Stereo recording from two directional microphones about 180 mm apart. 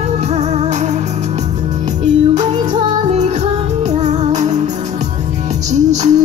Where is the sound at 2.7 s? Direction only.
40° right (ahead or behind).